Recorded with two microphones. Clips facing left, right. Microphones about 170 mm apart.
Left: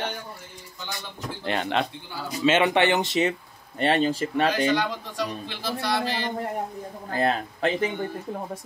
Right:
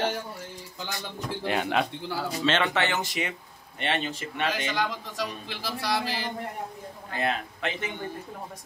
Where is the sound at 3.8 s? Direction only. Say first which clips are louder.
Left 8 dB; 35° left (ahead or behind).